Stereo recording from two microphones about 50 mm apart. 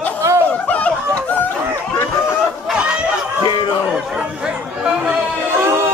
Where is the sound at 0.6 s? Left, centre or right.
Left.